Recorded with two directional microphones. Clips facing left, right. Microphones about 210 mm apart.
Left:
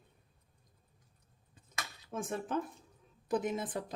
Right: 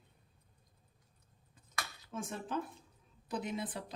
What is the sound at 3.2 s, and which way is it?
Speech, 50° left (ahead or behind).